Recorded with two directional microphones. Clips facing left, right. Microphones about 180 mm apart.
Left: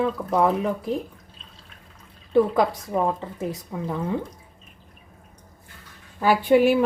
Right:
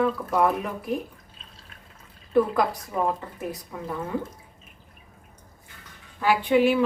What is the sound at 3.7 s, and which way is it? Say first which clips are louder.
Speech: left 5 dB; 20° left (ahead or behind).